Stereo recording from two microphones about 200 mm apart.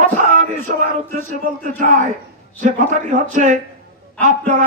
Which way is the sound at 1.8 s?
40° right (ahead or behind).